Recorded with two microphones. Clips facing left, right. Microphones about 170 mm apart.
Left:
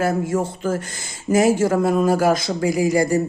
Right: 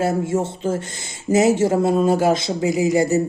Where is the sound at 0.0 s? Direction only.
25° right (ahead or behind).